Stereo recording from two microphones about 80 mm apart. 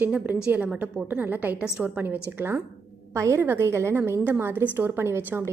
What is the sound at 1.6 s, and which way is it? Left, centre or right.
Speech, centre.